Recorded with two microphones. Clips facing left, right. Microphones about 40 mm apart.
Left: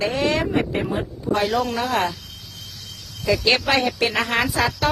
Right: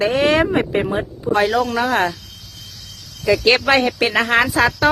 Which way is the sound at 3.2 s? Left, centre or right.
Right.